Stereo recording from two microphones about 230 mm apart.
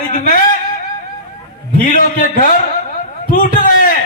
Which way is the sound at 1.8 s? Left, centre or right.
Left.